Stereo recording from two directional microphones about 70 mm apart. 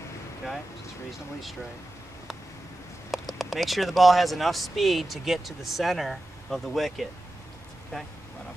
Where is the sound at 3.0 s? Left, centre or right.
Centre.